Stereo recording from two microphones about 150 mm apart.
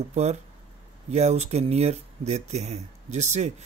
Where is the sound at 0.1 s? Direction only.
50° right (ahead or behind).